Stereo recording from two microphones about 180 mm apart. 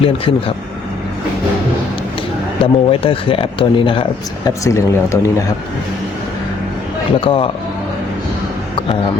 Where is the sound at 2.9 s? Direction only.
30° left (ahead or behind).